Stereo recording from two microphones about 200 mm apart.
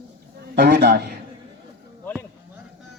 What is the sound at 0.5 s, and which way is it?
Speech, 50° right (ahead or behind).